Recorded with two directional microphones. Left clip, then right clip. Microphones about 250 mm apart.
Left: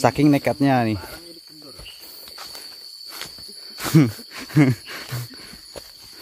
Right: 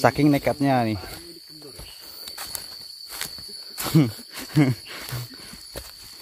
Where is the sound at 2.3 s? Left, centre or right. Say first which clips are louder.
Even; right.